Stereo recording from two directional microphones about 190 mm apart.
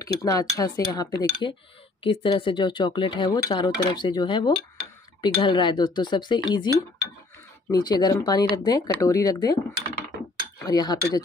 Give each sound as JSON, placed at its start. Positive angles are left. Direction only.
{"t": 0.0, "sound": "speech", "side_deg": 20}
{"t": 10.6, "sound": "speech", "side_deg": 20}